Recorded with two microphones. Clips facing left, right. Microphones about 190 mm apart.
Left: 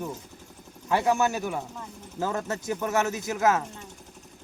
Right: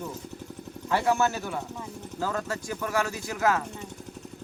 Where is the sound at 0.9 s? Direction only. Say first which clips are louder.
Left 1 dB; 15° left (ahead or behind).